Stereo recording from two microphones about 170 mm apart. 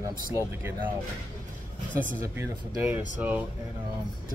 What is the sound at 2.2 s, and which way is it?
Speech, 20° right (ahead or behind).